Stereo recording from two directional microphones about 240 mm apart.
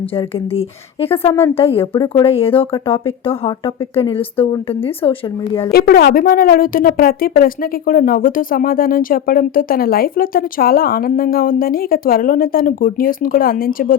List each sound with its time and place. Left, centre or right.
0.1 s speech: left
5.7 s a woman's voice: left